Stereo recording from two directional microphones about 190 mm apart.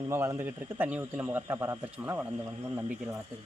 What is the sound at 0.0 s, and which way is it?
A man's voice, 15° right (ahead or behind).